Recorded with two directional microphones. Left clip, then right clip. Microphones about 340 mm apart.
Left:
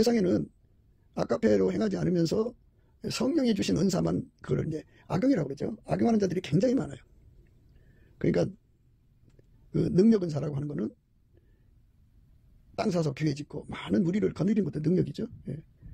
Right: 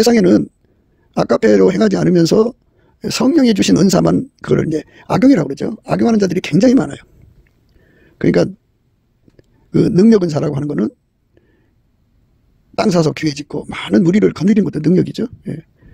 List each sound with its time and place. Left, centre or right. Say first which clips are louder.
0.0 s speech: right 15 dB; right
8.0 s a sound: right 14 dB; right
9.4 s speech: right 16 dB; right
12.7 s speech: right 15 dB; right